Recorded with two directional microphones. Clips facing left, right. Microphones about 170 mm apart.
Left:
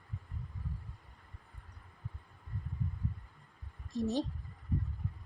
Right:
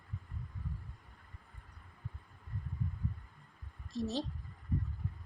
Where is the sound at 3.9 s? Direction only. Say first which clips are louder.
Left 3 dB; 15° left (ahead or behind).